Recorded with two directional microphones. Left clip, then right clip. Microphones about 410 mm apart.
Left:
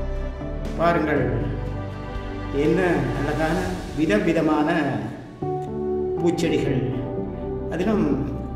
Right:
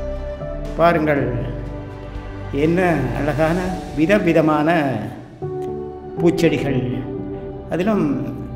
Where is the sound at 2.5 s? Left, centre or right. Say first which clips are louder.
Right 3 dB; centre.